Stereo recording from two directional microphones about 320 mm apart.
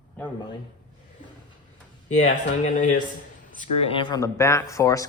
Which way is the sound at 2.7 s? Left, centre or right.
Left.